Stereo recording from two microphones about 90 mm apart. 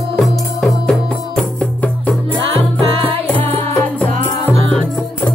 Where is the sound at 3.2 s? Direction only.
20° left (ahead or behind).